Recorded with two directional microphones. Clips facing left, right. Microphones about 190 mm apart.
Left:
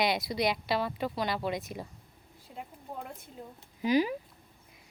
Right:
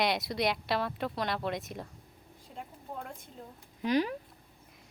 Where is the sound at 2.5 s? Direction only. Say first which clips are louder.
Even; 5° left (ahead or behind).